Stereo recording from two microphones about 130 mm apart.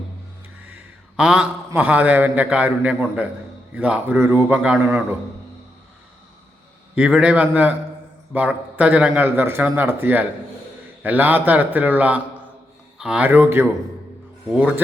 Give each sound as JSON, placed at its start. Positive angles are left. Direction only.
{"t": 1.1, "sound": "a man's voice", "side_deg": -10}
{"t": 6.9, "sound": "a man's voice", "side_deg": -10}